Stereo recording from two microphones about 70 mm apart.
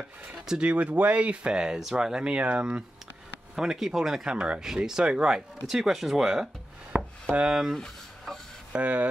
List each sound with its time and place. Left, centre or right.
0.5 s speech: centre
7.2 s speech: centre
7.5 s speech: centre
8.7 s speech: right